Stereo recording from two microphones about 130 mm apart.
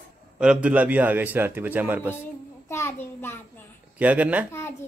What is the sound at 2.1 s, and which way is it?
A child's voice, 20° left (ahead or behind).